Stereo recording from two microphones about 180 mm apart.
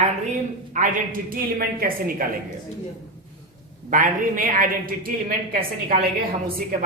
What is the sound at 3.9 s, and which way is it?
A woman's voice, 45° right (ahead or behind).